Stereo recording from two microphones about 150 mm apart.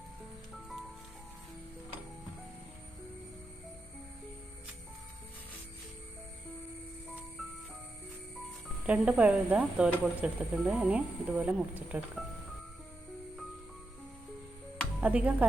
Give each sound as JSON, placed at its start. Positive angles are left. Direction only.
{"t": 8.9, "sound": "speech", "side_deg": -10}
{"t": 15.0, "sound": "speech", "side_deg": -10}